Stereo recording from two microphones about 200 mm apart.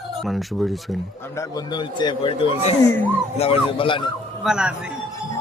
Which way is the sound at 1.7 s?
20° left (ahead or behind).